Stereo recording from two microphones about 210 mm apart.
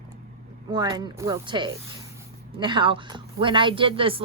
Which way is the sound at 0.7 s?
20° right (ahead or behind).